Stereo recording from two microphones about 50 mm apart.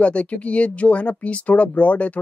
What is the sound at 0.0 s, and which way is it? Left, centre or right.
Speech, left.